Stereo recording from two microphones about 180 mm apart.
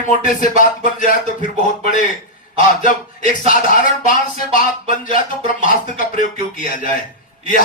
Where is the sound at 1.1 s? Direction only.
50° left (ahead or behind).